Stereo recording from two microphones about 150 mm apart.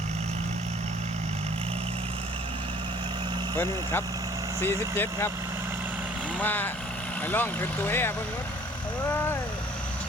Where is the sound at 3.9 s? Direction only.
15° left (ahead or behind).